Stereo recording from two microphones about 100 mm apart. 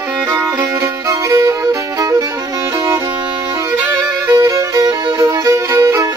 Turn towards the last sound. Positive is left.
turn(degrees=-30)  # may be behind; listen again after turning